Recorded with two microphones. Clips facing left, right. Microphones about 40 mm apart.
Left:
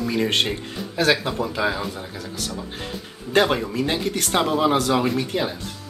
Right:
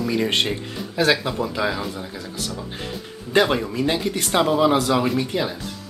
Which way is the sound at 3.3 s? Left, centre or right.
Centre.